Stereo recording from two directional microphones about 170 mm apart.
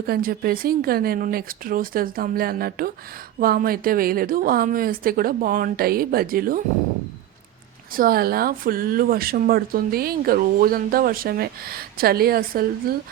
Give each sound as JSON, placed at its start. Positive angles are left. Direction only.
{"t": 0.1, "sound": "speech", "side_deg": -60}
{"t": 7.9, "sound": "speech", "side_deg": -60}